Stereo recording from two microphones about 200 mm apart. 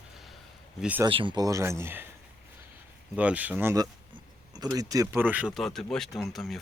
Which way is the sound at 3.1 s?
5° right (ahead or behind).